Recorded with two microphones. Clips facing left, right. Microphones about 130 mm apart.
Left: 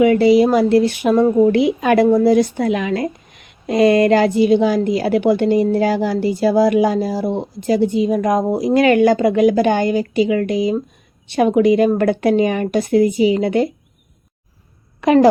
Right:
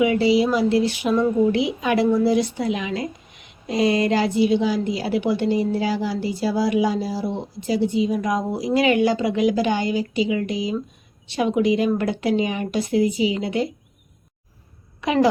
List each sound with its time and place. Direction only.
0.0 s speech: 50° left (ahead or behind)
15.0 s speech: 50° left (ahead or behind)